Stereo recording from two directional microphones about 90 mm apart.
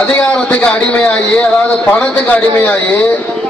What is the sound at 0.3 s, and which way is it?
A man's voice, 15° left (ahead or behind).